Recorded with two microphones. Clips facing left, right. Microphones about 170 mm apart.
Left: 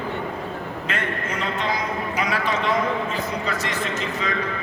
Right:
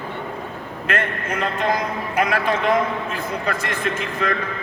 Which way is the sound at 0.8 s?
55° right (ahead or behind).